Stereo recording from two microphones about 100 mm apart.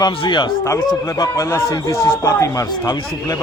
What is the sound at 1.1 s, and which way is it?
A man's voice, 30° left (ahead or behind).